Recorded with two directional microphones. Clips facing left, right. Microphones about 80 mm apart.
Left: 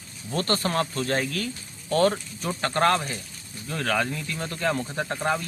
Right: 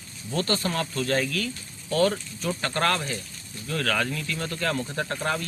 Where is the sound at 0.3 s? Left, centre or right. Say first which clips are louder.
Left 2 dB; left.